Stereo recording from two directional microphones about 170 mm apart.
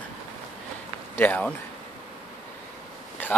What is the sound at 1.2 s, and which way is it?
Sheep, 10° left (ahead or behind).